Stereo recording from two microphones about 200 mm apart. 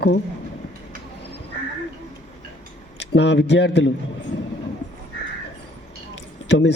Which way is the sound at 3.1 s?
60° left (ahead or behind).